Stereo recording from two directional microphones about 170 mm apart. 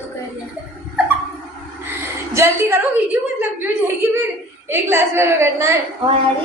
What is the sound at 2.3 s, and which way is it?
A woman's voice, 15° right (ahead or behind).